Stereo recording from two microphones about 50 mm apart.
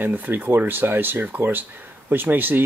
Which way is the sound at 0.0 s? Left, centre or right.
Right.